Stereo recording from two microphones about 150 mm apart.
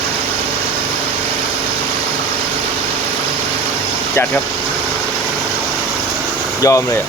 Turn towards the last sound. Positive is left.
turn(degrees=20)  # may be behind; listen again after turning